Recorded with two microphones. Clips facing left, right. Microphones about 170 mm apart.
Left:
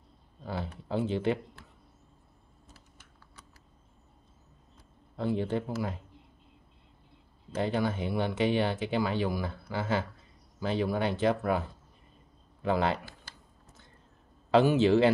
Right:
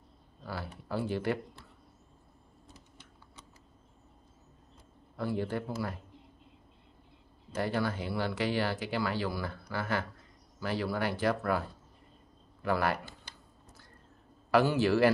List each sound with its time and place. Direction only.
0.7 s speech: 20° left (ahead or behind)
5.1 s speech: 20° left (ahead or behind)
7.5 s speech: 20° left (ahead or behind)
14.5 s speech: 20° left (ahead or behind)